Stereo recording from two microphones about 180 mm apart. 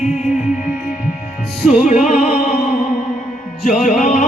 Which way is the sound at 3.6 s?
40° left (ahead or behind).